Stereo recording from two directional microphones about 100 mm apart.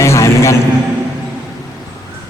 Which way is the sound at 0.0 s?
30° left (ahead or behind).